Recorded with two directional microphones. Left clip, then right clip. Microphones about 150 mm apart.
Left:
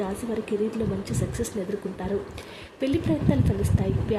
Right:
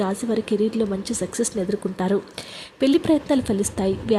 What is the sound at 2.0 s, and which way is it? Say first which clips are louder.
Speech: right 6 dB; 35° right (ahead or behind).